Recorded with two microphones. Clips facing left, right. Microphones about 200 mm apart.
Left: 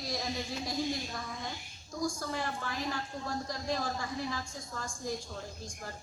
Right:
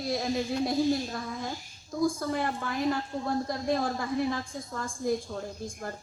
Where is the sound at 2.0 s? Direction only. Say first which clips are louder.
Right 7 dB; 55° right (ahead or behind).